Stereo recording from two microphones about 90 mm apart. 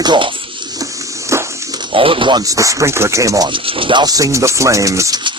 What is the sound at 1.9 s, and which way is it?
Speech, 80° right.